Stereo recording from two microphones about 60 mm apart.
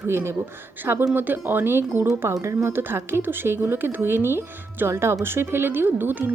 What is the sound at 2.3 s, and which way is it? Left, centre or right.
Speech, right.